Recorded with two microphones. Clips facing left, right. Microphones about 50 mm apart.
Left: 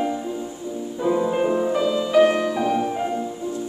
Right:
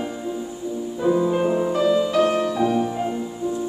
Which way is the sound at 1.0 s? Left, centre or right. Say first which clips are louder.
Right 1 dB; centre.